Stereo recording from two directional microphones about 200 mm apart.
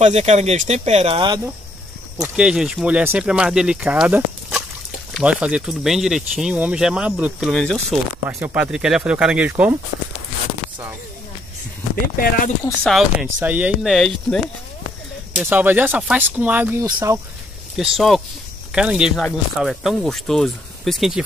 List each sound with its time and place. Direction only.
0.0 s speech: 35° right (ahead or behind)
2.1 s speech: 10° right (ahead or behind)
8.3 s speech: 10° right (ahead or behind)
12.8 s speech: centre (ahead or behind)
17.7 s speech: centre (ahead or behind)